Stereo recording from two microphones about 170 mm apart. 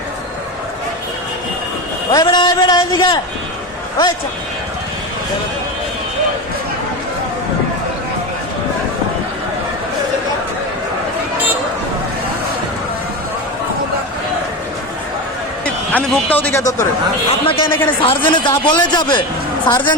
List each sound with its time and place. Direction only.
2.1 s a sound: 25° left (ahead or behind)
15.6 s speech: 10° left (ahead or behind)
17.4 s a man's voice: 30° left (ahead or behind)